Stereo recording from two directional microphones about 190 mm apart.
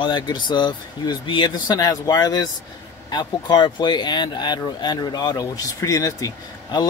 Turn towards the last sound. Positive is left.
turn(degrees=20)  # may be behind; listen again after turning